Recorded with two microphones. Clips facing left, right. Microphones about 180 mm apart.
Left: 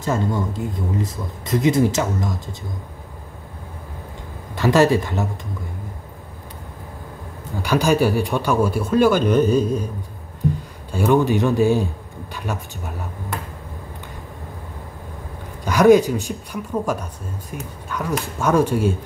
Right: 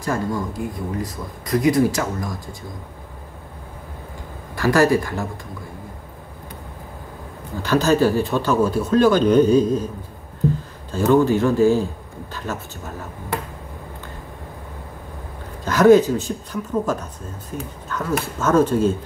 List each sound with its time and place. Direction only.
0.0 s speech: 25° left (ahead or behind)
4.6 s speech: 20° left (ahead or behind)
7.6 s speech: 10° left (ahead or behind)
10.9 s speech: 15° left (ahead or behind)
15.6 s speech: 15° left (ahead or behind)